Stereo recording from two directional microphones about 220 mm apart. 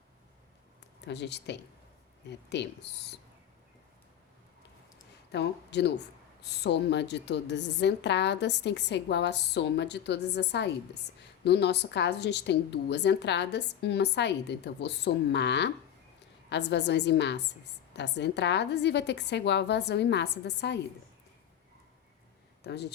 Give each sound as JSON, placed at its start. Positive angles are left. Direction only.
{"t": 1.0, "sound": "speech", "side_deg": 50}
{"t": 5.3, "sound": "speech", "side_deg": 50}
{"t": 22.6, "sound": "speech", "side_deg": 50}